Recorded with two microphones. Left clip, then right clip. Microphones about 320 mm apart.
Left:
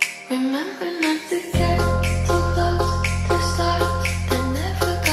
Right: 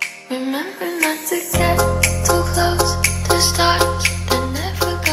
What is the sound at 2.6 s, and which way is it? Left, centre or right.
Music, right.